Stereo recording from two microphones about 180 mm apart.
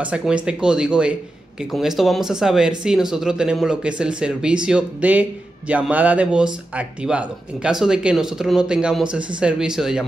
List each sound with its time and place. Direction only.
0.0 s speech: 5° right (ahead or behind)